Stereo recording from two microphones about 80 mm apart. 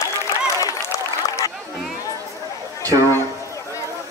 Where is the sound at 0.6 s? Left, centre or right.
Left.